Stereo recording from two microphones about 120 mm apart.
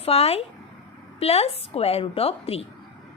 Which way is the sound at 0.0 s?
55° left (ahead or behind).